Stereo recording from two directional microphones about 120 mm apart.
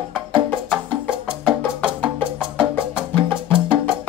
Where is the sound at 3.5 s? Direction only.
45° right (ahead or behind).